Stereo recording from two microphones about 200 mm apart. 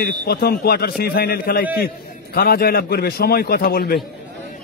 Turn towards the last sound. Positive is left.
turn(degrees=50)  # may be behind; listen again after turning